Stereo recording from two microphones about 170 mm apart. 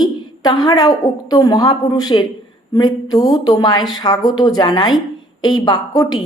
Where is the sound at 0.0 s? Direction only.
25° left (ahead or behind).